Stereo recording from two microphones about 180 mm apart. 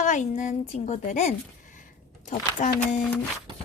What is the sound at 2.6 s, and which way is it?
Speech, 40° left (ahead or behind).